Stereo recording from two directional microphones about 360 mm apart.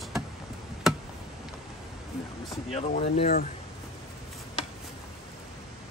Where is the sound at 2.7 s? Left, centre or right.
Centre.